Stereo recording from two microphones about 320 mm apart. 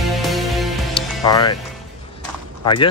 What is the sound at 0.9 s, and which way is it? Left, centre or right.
Music, centre.